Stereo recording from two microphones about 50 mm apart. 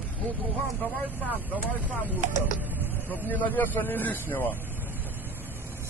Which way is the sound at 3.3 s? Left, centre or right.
Left.